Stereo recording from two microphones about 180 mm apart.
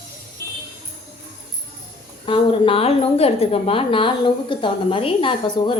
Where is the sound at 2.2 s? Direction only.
30° left (ahead or behind).